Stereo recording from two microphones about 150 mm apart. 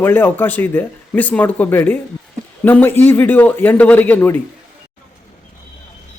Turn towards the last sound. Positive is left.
turn(degrees=15)  # may be behind; listen again after turning